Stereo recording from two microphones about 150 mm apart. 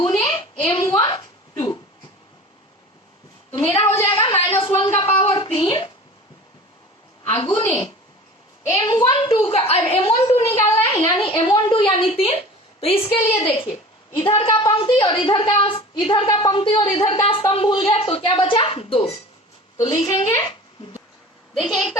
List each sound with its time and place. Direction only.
0.0 s a sound: 25° left (ahead or behind)
3.5 s a woman's voice: 35° left (ahead or behind)
3.8 s a woman's voice: 15° left (ahead or behind)
4.1 s a woman's voice: 35° left (ahead or behind)
7.3 s a woman's voice: 35° left (ahead or behind)
9.1 s a woman's voice: 40° left (ahead or behind)
10.2 s a woman's voice: 20° left (ahead or behind)
10.6 s a woman's voice: 40° left (ahead or behind)
13.0 s a woman's voice: 15° left (ahead or behind)
13.3 s a woman's voice: 35° left (ahead or behind)
21.6 s a woman's voice: 5° right (ahead or behind)